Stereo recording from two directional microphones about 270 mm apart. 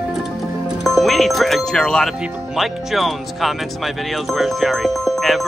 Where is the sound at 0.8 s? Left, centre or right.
Centre.